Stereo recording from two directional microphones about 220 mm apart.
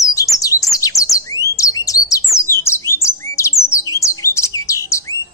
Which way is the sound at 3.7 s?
15° left (ahead or behind).